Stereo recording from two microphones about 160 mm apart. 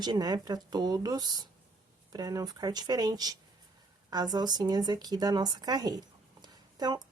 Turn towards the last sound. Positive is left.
turn(degrees=-25)  # may be behind; listen again after turning